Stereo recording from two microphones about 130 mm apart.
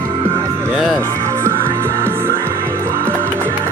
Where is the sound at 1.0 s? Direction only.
25° right (ahead or behind).